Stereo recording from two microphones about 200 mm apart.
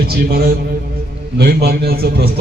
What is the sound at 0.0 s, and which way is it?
A man's voice, 50° right (ahead or behind).